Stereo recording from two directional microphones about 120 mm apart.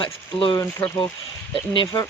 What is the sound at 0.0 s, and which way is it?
Speech, 45° left (ahead or behind).